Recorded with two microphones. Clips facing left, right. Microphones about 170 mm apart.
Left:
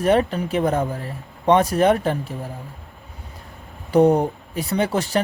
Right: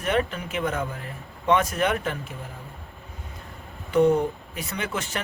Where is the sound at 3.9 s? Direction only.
35° left (ahead or behind).